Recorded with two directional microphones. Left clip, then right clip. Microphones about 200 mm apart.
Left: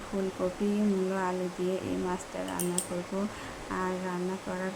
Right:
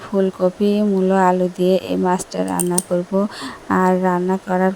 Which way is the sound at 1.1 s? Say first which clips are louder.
Right 16 dB; 40° right (ahead or behind).